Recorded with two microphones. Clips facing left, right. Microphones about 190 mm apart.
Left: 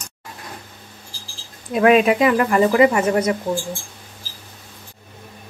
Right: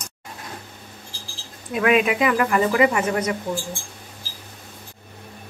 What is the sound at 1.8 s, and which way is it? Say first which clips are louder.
Speech: left 5 dB; 35° left (ahead or behind).